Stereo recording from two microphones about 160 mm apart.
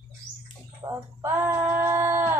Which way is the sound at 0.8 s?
15° right (ahead or behind).